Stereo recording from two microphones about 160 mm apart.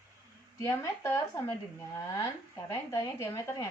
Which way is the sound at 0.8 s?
15° left (ahead or behind).